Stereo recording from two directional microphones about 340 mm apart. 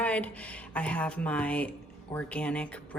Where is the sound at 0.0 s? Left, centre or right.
Centre.